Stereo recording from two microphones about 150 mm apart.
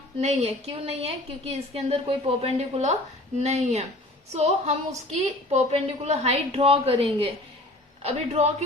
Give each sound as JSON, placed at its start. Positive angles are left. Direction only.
{"t": 0.2, "sound": "a woman's voice", "side_deg": -50}